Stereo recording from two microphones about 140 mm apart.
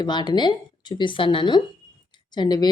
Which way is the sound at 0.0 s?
30° left (ahead or behind).